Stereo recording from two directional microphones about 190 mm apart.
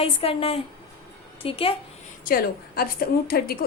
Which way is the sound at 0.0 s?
30° left (ahead or behind).